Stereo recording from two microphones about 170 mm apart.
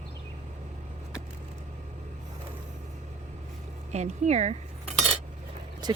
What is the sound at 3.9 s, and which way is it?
Speech, 40° right (ahead or behind).